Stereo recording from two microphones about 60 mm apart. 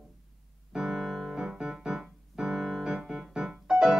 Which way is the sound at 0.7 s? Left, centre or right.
Centre.